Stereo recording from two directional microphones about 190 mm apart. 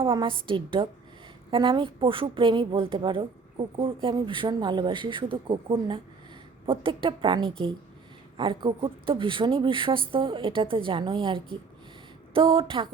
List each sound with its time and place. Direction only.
0.0 s a woman's voice: 25° right (ahead or behind)